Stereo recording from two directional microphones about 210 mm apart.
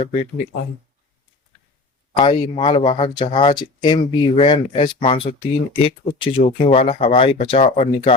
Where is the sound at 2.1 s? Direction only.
20° left (ahead or behind).